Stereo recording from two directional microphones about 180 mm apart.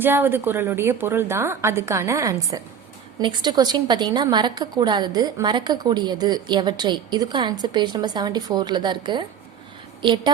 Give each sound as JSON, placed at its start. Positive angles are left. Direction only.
{"t": 0.0, "sound": "a woman's voice", "side_deg": -10}